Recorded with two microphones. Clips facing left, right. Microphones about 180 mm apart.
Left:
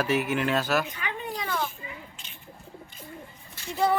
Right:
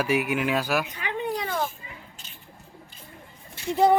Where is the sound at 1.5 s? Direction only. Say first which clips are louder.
Right 2 dB; 45° right (ahead or behind).